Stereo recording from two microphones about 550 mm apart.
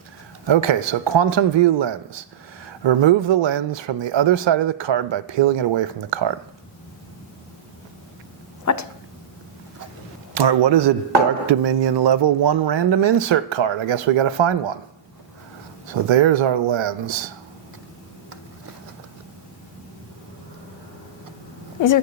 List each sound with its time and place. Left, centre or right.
0.4 s speech: right
8.6 s a sound: left
10.3 s speech: right
16.0 s speech: right